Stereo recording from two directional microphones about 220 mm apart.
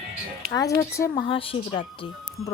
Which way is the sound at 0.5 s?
15° left (ahead or behind).